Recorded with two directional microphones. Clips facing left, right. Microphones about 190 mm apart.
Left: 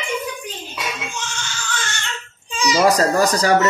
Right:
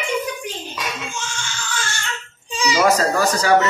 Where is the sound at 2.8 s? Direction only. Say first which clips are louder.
Left 2 dB; 40° left (ahead or behind).